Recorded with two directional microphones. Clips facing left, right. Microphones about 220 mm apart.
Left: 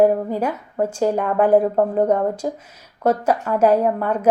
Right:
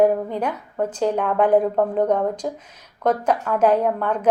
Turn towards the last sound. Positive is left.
turn(degrees=10)  # may be behind; listen again after turning